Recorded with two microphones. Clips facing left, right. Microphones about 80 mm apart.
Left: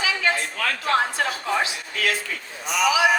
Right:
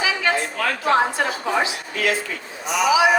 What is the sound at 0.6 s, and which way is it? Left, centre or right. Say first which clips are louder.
A woman's voice: right 3 dB; right.